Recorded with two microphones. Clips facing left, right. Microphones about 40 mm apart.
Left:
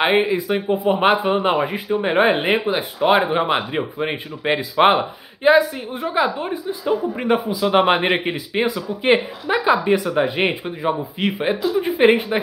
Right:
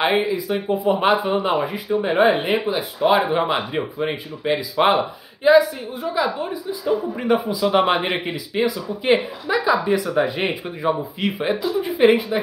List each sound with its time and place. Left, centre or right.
0.0 s speech: left
5.9 s a woman's voice: left
6.8 s speech: left